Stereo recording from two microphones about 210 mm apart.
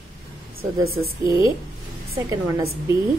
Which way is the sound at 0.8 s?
45° right (ahead or behind).